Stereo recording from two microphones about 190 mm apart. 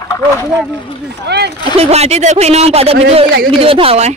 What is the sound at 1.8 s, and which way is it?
A woman's voice, 35° right (ahead or behind).